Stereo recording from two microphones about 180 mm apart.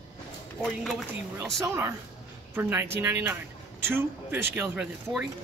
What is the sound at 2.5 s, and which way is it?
Speech, 10° right (ahead or behind).